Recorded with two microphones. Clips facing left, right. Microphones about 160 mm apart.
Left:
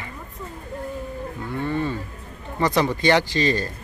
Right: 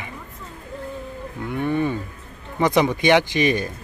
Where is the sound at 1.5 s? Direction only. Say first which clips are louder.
Right 3 dB; 15° right (ahead or behind).